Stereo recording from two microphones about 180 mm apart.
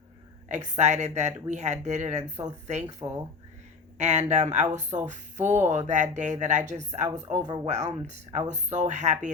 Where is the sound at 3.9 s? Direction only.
40° right (ahead or behind).